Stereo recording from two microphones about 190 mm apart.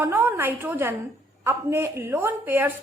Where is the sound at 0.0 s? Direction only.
10° right (ahead or behind).